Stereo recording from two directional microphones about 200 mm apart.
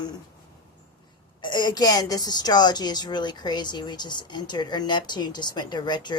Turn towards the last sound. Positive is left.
turn(degrees=20)  # may be behind; listen again after turning